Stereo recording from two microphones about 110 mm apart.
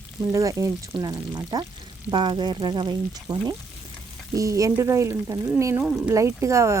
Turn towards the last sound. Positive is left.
turn(degrees=-25)  # may be behind; listen again after turning